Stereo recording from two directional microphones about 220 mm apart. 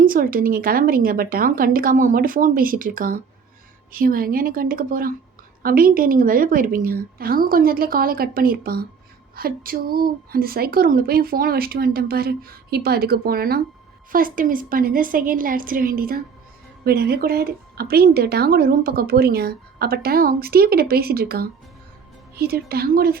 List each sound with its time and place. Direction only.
0.0 s a woman's voice: 40° right (ahead or behind)